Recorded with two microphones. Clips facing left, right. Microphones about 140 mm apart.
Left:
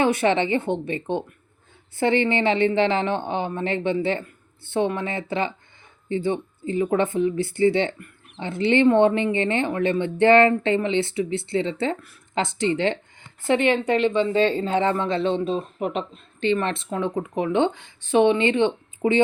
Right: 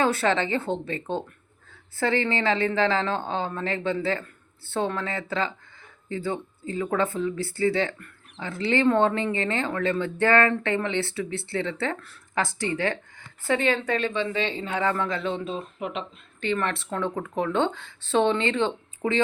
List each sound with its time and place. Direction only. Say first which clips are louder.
0.0 s speech: left 3 dB; 20° left (ahead or behind)
14.1 s speech: left 7 dB; 30° left (ahead or behind)
16.4 s speech: left 4 dB; 20° left (ahead or behind)